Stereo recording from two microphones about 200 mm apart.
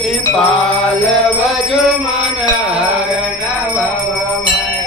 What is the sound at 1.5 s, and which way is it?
Music, centre (ahead or behind).